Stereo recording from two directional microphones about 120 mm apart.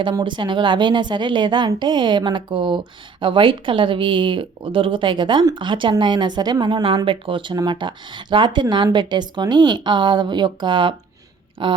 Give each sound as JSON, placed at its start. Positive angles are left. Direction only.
{"t": 0.0, "sound": "a woman's voice", "side_deg": -40}